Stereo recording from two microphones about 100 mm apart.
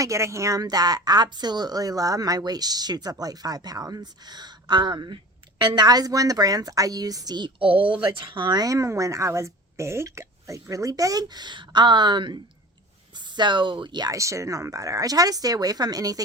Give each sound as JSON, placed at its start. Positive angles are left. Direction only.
{"t": 0.0, "sound": "a woman's voice", "side_deg": -30}
{"t": 14.1, "sound": "a woman's voice", "side_deg": -30}